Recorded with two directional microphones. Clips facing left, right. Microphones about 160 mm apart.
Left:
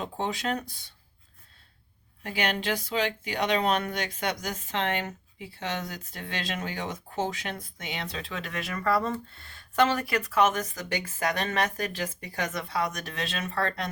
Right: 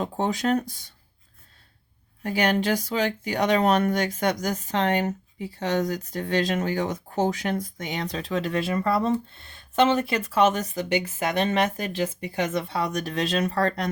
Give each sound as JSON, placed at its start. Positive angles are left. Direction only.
{"t": 0.0, "sound": "speech", "side_deg": -45}
{"t": 2.2, "sound": "speech", "side_deg": -45}